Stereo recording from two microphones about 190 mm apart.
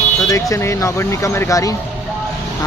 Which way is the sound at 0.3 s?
15° left (ahead or behind).